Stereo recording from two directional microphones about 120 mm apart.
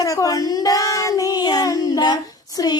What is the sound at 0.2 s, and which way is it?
Child singing, 30° left (ahead or behind).